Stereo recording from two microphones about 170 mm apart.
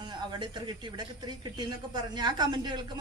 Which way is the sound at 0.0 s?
25° right (ahead or behind).